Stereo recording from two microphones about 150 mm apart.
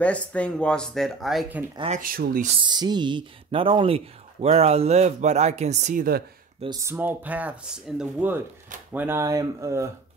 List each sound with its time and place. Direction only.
0.0 s speech: 10° left (ahead or behind)
1.9 s speech: 70° right (ahead or behind)
2.6 s speech: 30° right (ahead or behind); by 6.0 s 50° right (ahead or behind)
6.8 s speech: 15° right (ahead or behind)